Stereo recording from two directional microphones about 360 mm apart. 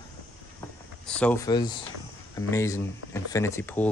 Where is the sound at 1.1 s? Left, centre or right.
Centre.